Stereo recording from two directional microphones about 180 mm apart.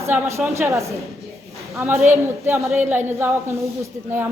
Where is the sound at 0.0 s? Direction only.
15° right (ahead or behind).